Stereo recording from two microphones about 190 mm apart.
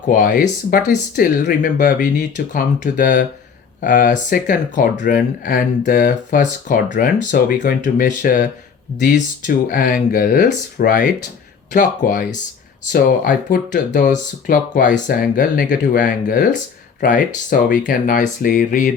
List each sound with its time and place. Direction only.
0.3 s speech: 45° left (ahead or behind)